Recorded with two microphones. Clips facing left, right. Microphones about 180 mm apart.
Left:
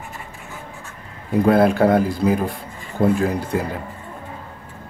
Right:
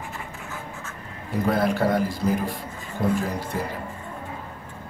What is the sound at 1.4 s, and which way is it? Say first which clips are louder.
Speech: left 7 dB; 60° left (ahead or behind).